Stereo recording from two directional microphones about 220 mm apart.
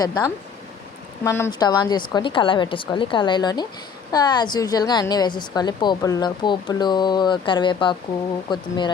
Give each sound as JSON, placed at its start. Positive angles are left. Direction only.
{"t": 0.0, "sound": "a woman's voice", "side_deg": 15}